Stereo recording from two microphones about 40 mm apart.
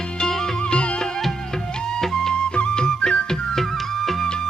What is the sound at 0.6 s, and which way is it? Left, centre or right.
Music, left.